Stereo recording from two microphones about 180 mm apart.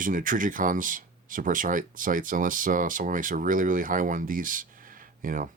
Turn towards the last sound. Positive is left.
turn(degrees=-50)  # may be behind; listen again after turning